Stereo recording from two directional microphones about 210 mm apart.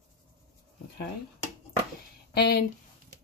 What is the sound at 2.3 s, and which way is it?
Speech, 50° left (ahead or behind).